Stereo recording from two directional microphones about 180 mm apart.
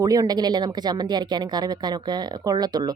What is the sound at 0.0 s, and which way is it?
Speech, 20° right (ahead or behind).